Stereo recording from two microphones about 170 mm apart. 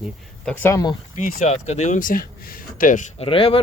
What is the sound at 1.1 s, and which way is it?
Speech, 50° left (ahead or behind).